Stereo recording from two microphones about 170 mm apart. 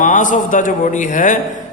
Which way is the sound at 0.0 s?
50° left (ahead or behind).